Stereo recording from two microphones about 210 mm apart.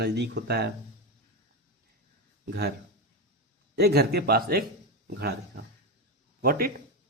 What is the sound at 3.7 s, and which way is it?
Speech, 50° right (ahead or behind).